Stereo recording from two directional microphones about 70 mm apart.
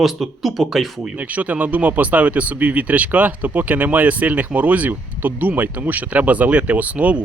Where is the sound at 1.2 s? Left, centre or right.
Right.